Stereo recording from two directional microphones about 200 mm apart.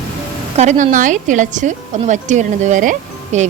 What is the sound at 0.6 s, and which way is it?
A woman's voice, 35° right (ahead or behind).